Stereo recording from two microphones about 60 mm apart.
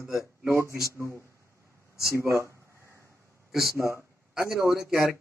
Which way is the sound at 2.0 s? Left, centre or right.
Left.